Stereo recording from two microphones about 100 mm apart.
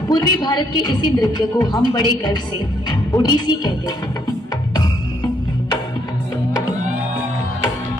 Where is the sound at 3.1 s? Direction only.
45° left (ahead or behind).